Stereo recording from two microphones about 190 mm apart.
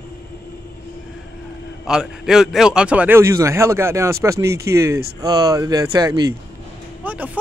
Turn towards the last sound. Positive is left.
turn(degrees=-10)  # may be behind; listen again after turning